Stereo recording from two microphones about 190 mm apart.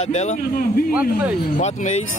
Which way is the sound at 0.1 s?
40° left (ahead or behind).